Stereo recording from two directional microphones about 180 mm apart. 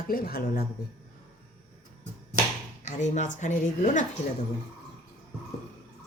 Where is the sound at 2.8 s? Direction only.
40° left (ahead or behind).